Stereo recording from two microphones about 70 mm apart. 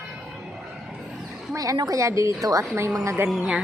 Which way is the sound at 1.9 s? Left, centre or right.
Right.